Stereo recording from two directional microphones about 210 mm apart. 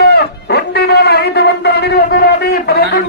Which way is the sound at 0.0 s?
50° left (ahead or behind).